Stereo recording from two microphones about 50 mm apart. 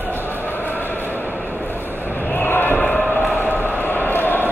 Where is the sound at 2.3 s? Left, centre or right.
Left.